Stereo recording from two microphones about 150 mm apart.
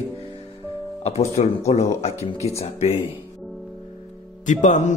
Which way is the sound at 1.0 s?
45° left (ahead or behind).